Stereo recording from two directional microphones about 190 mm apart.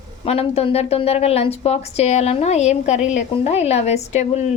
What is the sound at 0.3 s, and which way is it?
A woman's voice, 30° left (ahead or behind).